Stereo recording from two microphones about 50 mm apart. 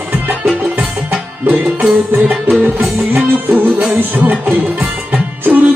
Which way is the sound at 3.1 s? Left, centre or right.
Right.